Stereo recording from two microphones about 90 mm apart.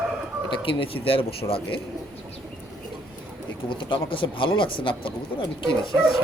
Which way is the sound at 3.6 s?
70° left (ahead or behind).